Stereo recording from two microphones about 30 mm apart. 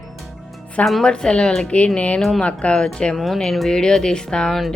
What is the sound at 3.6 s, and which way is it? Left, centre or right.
Speech, left.